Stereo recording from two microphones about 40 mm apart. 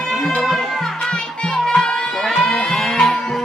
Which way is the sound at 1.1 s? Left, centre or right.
Left.